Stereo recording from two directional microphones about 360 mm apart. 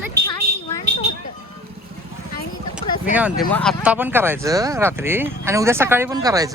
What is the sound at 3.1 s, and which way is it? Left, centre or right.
Speech, centre.